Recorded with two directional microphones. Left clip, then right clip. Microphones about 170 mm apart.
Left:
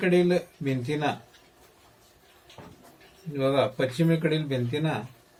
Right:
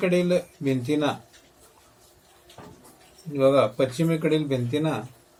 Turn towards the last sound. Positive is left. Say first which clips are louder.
# right 3 dB
turn(degrees=5)  # may be behind; listen again after turning